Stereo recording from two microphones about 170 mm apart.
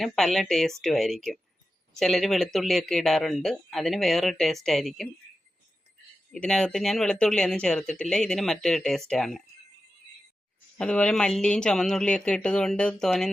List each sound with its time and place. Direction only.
0.0 s speech: centre (ahead or behind)
6.3 s speech: 5° left (ahead or behind)
10.8 s speech: 5° left (ahead or behind)